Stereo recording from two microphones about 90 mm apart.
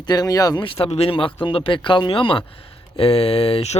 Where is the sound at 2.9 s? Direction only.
90° left.